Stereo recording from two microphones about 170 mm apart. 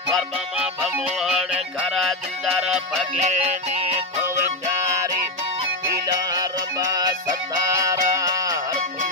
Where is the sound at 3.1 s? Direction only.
45° right (ahead or behind).